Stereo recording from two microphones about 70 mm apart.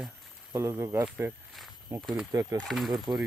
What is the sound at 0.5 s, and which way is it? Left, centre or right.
Speech, right.